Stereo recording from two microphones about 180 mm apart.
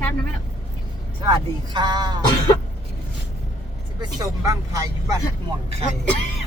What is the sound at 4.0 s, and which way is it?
Speech, 20° right (ahead or behind).